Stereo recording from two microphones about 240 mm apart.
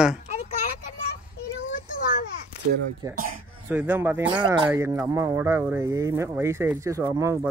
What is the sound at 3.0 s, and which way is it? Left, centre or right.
Speech, centre.